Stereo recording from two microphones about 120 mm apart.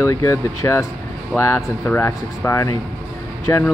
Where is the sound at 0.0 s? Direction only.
25° left (ahead or behind).